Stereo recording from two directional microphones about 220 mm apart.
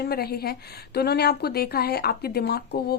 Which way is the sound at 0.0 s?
45° left (ahead or behind).